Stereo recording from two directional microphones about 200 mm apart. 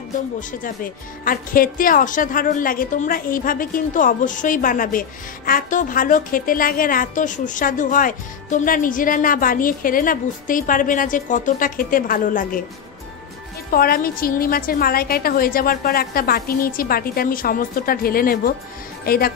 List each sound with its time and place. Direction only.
0.4 s speech: 40° left (ahead or behind)
13.7 s speech: 45° left (ahead or behind)